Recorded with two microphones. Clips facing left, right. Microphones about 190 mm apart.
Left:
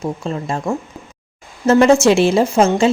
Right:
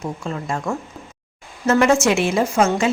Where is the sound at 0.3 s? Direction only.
25° left (ahead or behind).